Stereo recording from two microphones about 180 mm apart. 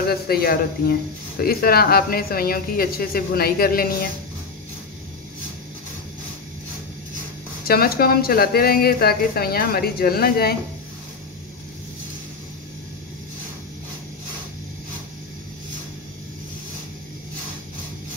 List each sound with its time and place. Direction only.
0.1 s speech: 60° left (ahead or behind)
7.6 s speech: 55° left (ahead or behind)